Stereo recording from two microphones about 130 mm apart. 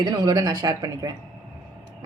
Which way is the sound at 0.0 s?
35° right (ahead or behind).